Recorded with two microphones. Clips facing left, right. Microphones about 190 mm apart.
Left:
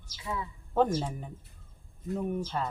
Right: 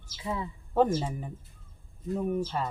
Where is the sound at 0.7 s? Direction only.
5° right (ahead or behind).